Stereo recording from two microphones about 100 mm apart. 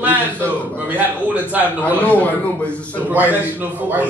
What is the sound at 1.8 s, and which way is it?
Speech, 15° left (ahead or behind).